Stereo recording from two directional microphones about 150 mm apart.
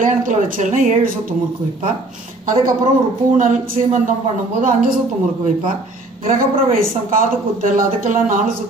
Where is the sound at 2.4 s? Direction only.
65° right (ahead or behind).